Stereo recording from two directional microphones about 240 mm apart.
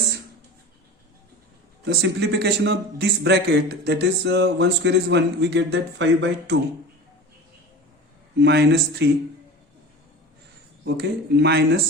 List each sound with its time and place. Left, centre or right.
1.9 s a man's voice: right
8.4 s a man's voice: right
10.8 s a man's voice: right